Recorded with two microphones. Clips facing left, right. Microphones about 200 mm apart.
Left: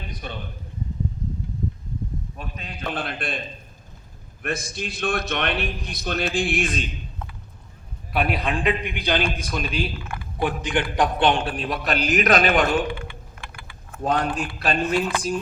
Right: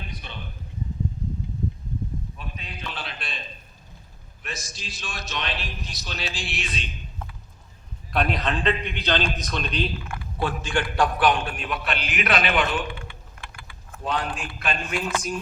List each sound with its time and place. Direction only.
0.2 s a sound: 45° left (ahead or behind)
2.4 s a man's voice: 50° left (ahead or behind)
4.4 s a man's voice: 55° left (ahead or behind)
8.1 s a man's voice: 5° left (ahead or behind); by 12.8 s 40° left (ahead or behind)
14.0 s a man's voice: 45° left (ahead or behind)